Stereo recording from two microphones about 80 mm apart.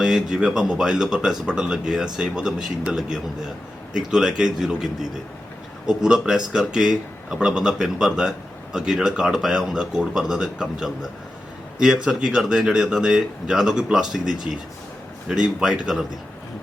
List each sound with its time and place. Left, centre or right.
0.0 s speech: centre